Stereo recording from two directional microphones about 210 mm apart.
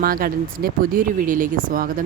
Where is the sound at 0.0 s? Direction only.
45° right (ahead or behind).